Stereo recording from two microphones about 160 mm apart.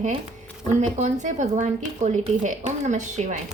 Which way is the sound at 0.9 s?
45° right (ahead or behind).